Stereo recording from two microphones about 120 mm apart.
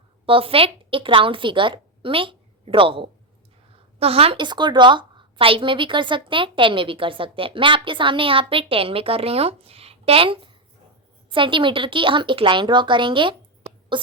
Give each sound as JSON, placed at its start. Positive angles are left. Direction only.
{"t": 0.3, "sound": "a woman's voice", "side_deg": -50}